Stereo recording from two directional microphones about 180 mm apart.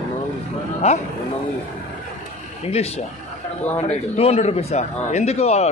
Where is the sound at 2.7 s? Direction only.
35° left (ahead or behind).